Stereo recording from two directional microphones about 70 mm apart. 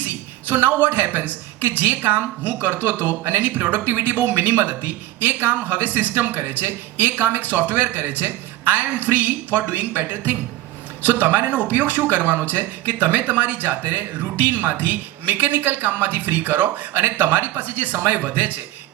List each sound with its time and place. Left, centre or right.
0.0 s a woman's voice: right